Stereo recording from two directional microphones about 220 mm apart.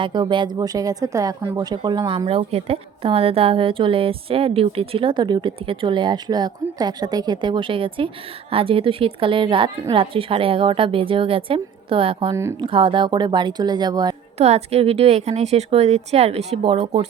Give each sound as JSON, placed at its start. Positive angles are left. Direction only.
{"t": 0.0, "sound": "speech", "side_deg": -20}
{"t": 14.3, "sound": "speech", "side_deg": -30}